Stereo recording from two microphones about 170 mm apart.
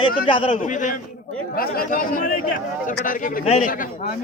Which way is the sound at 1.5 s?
60° left (ahead or behind).